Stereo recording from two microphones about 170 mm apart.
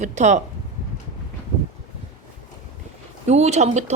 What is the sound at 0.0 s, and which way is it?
Speech, 45° right (ahead or behind).